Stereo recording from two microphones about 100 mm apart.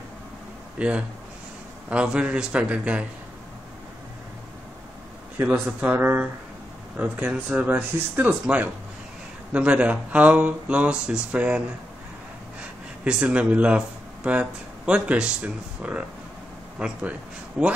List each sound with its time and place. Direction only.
0.7 s speech: 10° right (ahead or behind)
5.4 s speech: 15° right (ahead or behind)
13.0 s speech: 10° right (ahead or behind)